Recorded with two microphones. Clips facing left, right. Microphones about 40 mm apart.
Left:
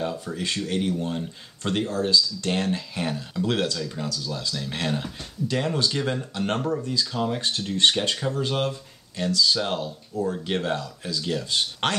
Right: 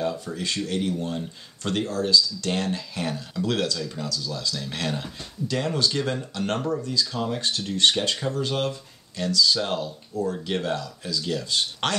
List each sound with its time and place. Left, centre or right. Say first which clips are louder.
0.0 s speech: right 1 dB; centre
4.8 s speech: left 2 dB; centre
7.1 s speech: left 1 dB; centre